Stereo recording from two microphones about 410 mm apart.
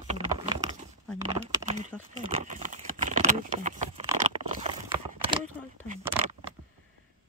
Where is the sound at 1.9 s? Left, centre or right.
Centre.